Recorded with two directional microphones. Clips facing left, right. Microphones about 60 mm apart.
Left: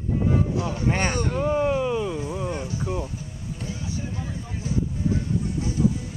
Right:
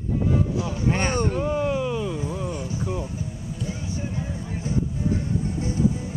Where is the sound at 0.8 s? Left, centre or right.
Left.